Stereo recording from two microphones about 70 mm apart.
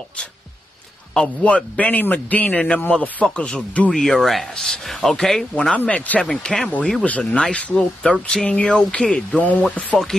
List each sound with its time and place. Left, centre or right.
1.1 s a man's voice: centre
4.0 s speech: centre